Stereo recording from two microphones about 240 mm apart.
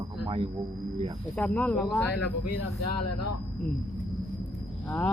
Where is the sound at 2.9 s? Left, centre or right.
Left.